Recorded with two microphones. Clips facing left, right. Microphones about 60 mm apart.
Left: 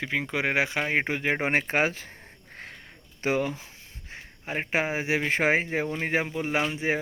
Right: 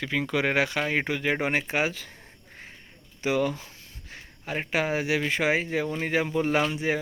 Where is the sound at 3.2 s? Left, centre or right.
Left.